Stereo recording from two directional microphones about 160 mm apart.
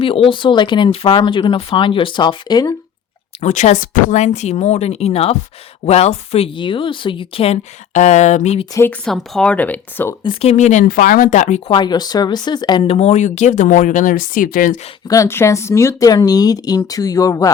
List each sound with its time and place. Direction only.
0.0 s speech: 35° left (ahead or behind)
3.4 s speech: 50° left (ahead or behind)
8.7 s speech: 15° left (ahead or behind)
9.0 s speech: centre (ahead or behind)
10.5 s speech: 50° left (ahead or behind)
10.8 s speech: 60° left (ahead or behind)
11.7 s speech: 25° left (ahead or behind); by 14.8 s 60° left (ahead or behind)
15.0 s speech: 20° left (ahead or behind)